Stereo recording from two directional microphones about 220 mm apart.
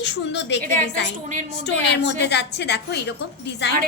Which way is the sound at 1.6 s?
50° left (ahead or behind).